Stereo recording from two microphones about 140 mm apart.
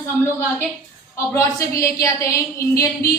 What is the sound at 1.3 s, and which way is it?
A woman's voice, 20° left (ahead or behind).